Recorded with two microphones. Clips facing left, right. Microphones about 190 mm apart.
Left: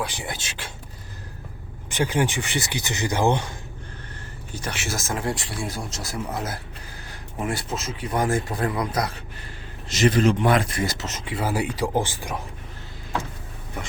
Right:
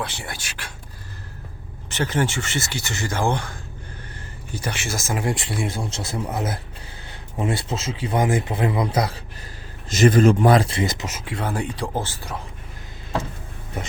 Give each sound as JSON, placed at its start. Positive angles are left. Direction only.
{"t": 0.0, "sound": "speech", "side_deg": 15}
{"t": 1.9, "sound": "speech", "side_deg": 15}
{"t": 4.5, "sound": "speech", "side_deg": 0}
{"t": 5.2, "sound": "speech", "side_deg": -20}
{"t": 9.9, "sound": "speech", "side_deg": -50}
{"t": 11.3, "sound": "speech", "side_deg": 5}